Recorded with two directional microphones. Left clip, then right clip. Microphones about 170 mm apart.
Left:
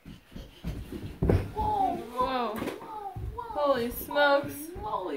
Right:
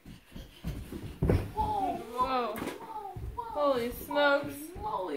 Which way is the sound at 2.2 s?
55° left (ahead or behind).